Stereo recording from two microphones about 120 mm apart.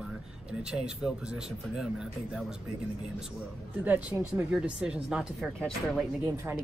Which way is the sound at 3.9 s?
15° right (ahead or behind).